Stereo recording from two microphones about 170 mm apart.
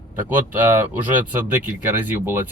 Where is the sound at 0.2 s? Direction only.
10° right (ahead or behind).